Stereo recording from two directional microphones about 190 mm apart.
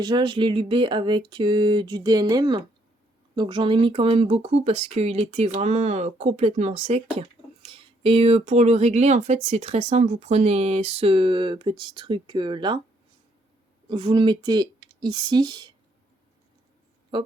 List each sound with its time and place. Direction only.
0.0 s speech: 25° right (ahead or behind)
13.9 s speech: 25° right (ahead or behind)
17.1 s speech: 25° right (ahead or behind)